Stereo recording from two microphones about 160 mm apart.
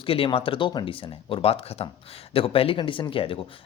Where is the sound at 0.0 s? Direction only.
35° left (ahead or behind).